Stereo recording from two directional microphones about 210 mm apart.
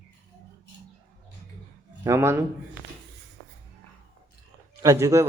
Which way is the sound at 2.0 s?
15° right (ahead or behind).